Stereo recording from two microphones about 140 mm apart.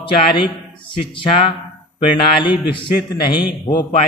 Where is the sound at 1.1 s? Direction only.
40° left (ahead or behind).